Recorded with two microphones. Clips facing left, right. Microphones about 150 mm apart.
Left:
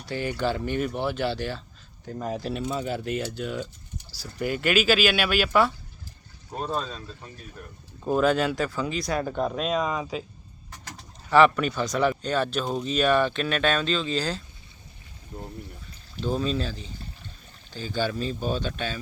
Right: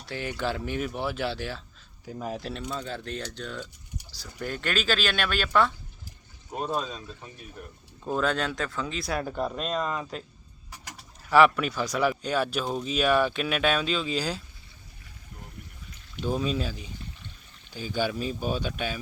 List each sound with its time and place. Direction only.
0.0 s speech: centre (ahead or behind)
6.5 s speech: 10° right (ahead or behind)
8.0 s speech: 5° left (ahead or behind)
10.7 s speech: 10° right (ahead or behind)
15.3 s a sound: 30° left (ahead or behind)
16.2 s speech: 10° right (ahead or behind)